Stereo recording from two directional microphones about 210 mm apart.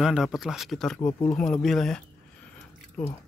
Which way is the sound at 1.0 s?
15° left (ahead or behind).